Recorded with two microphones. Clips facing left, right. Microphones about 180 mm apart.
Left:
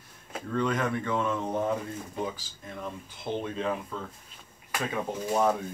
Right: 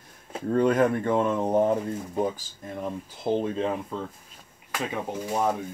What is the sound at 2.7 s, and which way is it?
Speech, 35° right (ahead or behind).